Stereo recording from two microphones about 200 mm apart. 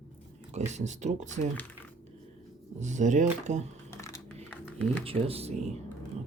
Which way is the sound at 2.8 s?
40° right (ahead or behind).